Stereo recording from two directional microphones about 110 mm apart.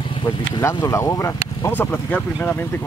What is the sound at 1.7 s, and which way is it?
Speech, 20° left (ahead or behind).